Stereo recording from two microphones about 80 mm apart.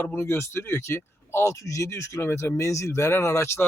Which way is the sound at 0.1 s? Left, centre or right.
Left.